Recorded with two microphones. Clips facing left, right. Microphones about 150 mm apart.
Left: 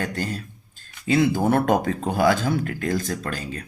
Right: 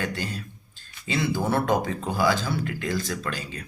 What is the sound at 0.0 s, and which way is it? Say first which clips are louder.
Speech: left 3 dB; 45° left (ahead or behind).